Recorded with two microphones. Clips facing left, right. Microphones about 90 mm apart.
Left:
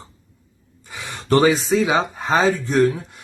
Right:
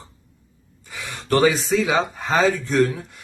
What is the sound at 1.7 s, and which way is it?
Speech, 30° left (ahead or behind).